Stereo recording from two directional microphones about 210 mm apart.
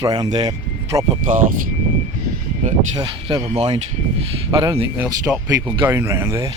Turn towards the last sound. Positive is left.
turn(degrees=-15)  # may be behind; listen again after turning